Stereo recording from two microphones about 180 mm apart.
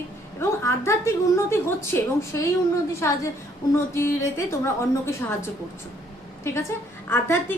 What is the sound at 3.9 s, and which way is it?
Speech, 15° left (ahead or behind).